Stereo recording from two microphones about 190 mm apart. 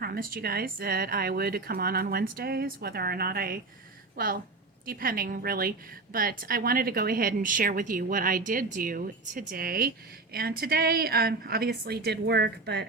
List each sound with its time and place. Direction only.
0.0 s a woman's voice: 50° right (ahead or behind)